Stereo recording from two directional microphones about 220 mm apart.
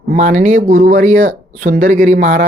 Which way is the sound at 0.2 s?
35° right (ahead or behind).